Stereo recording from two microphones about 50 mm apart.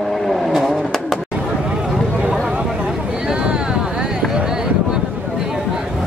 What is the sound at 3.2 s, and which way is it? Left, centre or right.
Vehicle, centre.